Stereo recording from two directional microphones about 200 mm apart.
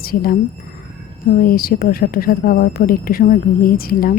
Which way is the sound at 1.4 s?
45° left (ahead or behind).